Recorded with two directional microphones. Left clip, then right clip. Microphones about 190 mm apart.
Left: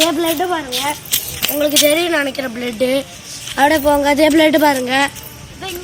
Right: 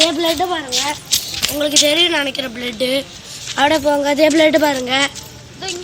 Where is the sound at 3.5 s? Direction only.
20° left (ahead or behind).